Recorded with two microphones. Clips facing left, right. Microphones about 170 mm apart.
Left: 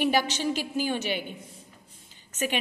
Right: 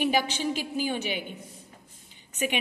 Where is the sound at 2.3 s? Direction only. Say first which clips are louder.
Even; 15° right (ahead or behind).